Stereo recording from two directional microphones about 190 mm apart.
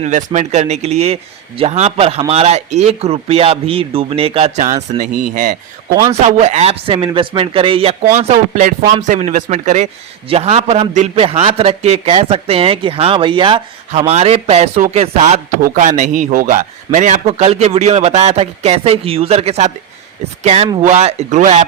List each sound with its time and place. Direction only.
0.0 s speech: 40° right (ahead or behind)